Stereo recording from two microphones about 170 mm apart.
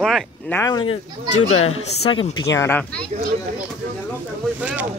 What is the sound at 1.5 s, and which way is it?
Speech, 35° left (ahead or behind).